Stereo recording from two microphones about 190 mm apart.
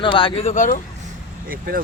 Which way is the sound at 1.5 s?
50° right (ahead or behind).